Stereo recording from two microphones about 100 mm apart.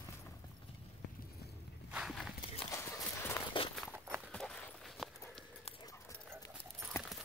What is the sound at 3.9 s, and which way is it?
Clip-clop, 25° right (ahead or behind).